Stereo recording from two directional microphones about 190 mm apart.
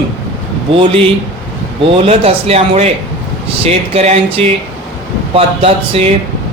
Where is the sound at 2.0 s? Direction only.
30° right (ahead or behind).